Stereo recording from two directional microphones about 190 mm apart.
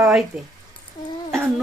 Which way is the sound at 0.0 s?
5° right (ahead or behind).